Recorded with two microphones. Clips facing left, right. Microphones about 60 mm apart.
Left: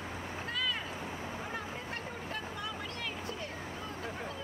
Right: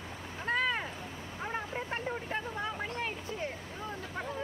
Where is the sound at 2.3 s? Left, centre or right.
Right.